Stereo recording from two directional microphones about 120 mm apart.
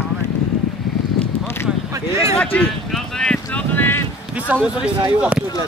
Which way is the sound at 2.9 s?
5° left (ahead or behind).